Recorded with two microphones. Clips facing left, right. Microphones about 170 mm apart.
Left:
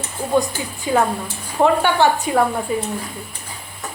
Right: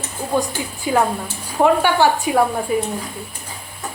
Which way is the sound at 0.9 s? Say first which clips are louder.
Even; 10° right (ahead or behind).